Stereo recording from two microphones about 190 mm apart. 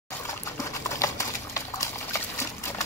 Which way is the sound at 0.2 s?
15° left (ahead or behind).